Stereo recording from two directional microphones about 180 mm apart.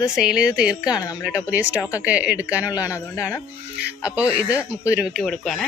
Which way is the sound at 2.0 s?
5° right (ahead or behind).